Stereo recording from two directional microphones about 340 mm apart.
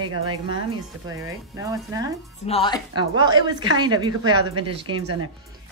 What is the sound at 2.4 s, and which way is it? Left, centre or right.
Speech, centre.